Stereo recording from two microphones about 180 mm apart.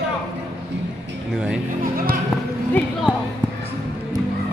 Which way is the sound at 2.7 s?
10° left (ahead or behind).